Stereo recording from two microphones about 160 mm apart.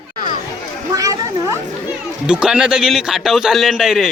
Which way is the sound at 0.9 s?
20° right (ahead or behind).